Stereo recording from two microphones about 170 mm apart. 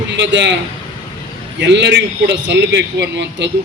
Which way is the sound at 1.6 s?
90° right.